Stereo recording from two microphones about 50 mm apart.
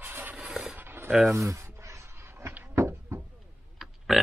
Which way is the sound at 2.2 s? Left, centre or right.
Right.